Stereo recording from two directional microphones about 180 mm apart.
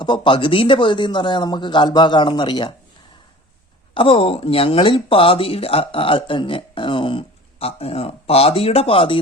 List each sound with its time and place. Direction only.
0.0 s a man's voice: 25° left (ahead or behind)
3.9 s speech: 30° left (ahead or behind)